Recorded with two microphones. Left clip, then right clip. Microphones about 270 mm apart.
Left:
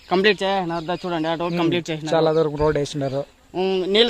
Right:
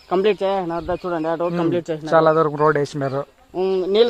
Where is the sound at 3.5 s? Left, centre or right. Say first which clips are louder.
Right 1 dB; left.